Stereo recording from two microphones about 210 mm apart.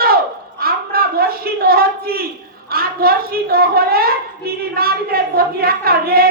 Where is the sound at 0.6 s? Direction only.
45° right (ahead or behind).